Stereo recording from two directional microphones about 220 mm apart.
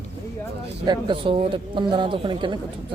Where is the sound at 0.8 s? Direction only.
20° right (ahead or behind).